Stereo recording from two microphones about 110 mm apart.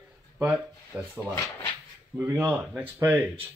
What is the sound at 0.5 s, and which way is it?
Speech, 10° right (ahead or behind).